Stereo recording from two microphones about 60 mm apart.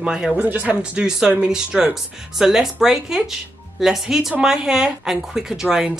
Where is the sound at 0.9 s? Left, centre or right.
Centre.